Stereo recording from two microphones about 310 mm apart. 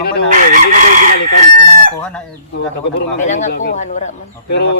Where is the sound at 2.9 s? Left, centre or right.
Left.